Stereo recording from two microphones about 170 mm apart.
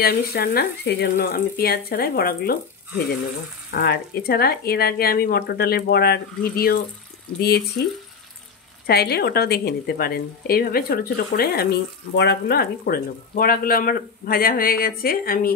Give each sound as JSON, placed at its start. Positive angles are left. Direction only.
{"t": 0.0, "sound": "speech", "side_deg": 65}
{"t": 1.1, "sound": "speech", "side_deg": 60}
{"t": 3.7, "sound": "speech", "side_deg": 65}
{"t": 8.8, "sound": "speech", "side_deg": 65}